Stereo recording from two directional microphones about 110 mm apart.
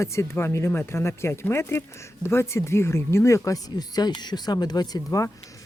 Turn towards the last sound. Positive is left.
turn(degrees=30)  # may be behind; listen again after turning